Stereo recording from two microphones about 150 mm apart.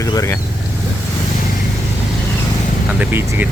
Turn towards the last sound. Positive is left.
turn(degrees=-15)  # may be behind; listen again after turning